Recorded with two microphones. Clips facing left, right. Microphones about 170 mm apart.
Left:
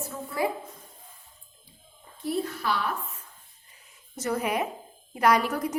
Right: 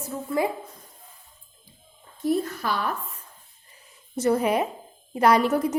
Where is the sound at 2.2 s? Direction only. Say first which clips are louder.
Right 4 dB; 45° right (ahead or behind).